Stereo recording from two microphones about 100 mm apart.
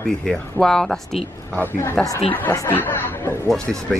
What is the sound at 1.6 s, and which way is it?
A man's voice, 25° left (ahead or behind).